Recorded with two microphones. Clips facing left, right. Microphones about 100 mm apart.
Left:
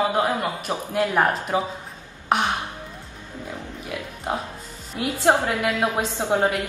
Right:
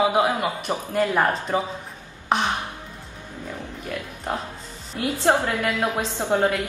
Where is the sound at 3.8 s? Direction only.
10° left (ahead or behind).